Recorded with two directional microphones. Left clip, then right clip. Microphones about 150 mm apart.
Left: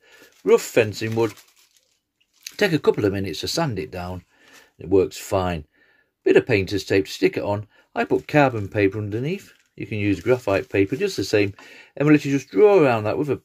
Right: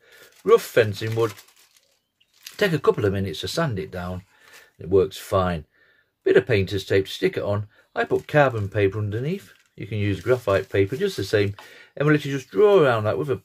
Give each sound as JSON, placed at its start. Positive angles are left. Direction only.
{"t": 0.5, "sound": "speech", "side_deg": 35}
{"t": 2.5, "sound": "speech", "side_deg": 35}